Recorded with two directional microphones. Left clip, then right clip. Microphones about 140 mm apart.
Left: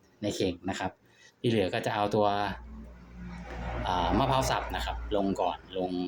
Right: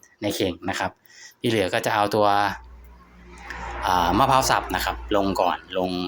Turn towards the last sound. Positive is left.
turn(degrees=-25)  # may be behind; listen again after turning